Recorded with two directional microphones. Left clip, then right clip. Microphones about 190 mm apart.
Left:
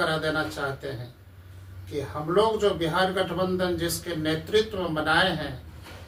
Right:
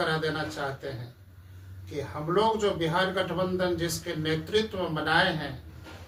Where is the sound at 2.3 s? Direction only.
15° right (ahead or behind).